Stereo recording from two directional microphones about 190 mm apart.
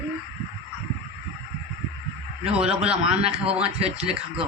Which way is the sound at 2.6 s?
5° right (ahead or behind).